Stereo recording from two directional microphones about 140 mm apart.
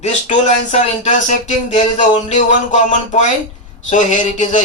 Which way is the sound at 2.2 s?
60° left (ahead or behind).